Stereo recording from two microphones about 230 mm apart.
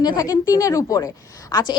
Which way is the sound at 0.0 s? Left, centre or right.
Centre.